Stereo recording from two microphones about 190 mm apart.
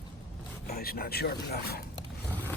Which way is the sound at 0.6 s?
50° left (ahead or behind).